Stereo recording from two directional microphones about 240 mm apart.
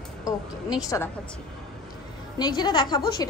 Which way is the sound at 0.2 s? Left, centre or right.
Centre.